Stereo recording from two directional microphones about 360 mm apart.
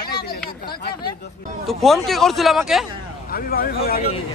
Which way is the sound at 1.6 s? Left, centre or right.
Centre.